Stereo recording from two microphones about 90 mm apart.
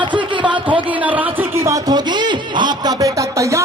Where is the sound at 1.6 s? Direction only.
35° right (ahead or behind).